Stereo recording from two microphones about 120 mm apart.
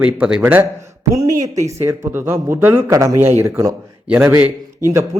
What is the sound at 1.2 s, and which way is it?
A man's voice, 25° right (ahead or behind).